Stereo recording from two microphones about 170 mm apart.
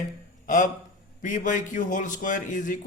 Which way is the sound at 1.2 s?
50° left (ahead or behind).